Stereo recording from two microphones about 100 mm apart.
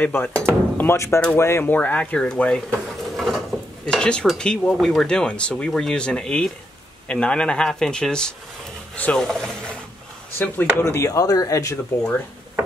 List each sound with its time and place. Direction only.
0.0 s speech: 20° left (ahead or behind)
3.2 s dishes: centre (ahead or behind)
4.4 s speech: 10° left (ahead or behind)
10.3 s speech: 20° left (ahead or behind)
10.8 s speech: 30° left (ahead or behind)